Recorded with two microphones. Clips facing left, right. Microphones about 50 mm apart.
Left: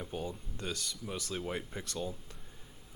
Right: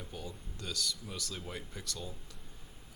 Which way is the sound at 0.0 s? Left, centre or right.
Left.